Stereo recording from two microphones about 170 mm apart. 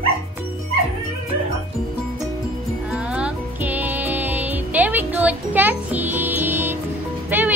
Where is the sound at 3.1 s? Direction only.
10° right (ahead or behind).